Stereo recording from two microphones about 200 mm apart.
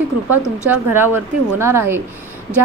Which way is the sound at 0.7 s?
10° right (ahead or behind).